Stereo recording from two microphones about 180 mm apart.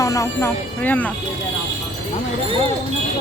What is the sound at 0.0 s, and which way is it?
Speech, 20° left (ahead or behind).